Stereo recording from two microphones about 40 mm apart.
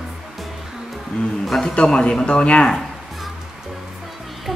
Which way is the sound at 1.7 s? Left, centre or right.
Left.